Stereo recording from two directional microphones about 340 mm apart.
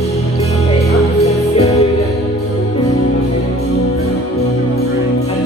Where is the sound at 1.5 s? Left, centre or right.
Centre.